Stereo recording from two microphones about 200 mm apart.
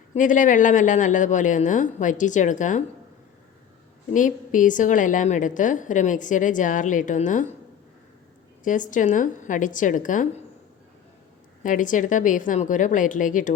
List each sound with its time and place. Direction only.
0.1 s a woman's voice: 40° left (ahead or behind)
4.1 s a woman's voice: 40° left (ahead or behind)
8.6 s a woman's voice: 40° left (ahead or behind)
11.6 s a woman's voice: 40° left (ahead or behind)